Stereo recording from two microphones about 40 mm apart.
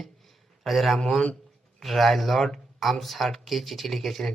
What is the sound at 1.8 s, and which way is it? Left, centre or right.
Speech, centre.